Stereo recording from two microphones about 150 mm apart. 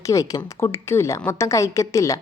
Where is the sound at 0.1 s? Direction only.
25° left (ahead or behind).